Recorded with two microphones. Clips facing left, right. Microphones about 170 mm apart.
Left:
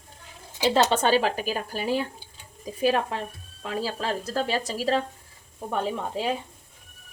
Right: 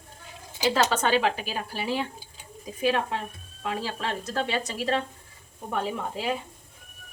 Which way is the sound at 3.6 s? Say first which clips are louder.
Left 1 dB; 35° left (ahead or behind).